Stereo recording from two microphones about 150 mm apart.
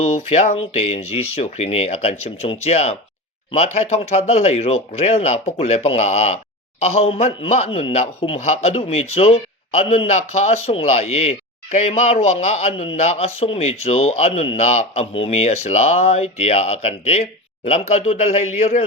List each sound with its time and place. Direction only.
0.0 s a man's voice: 45° left (ahead or behind)